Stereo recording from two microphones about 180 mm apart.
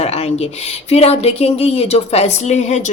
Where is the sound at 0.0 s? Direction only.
35° left (ahead or behind).